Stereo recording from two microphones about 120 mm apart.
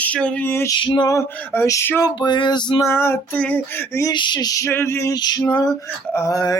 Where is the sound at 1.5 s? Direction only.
25° left (ahead or behind).